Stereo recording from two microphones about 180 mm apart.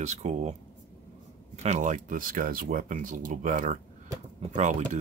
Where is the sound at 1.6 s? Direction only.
40° right (ahead or behind).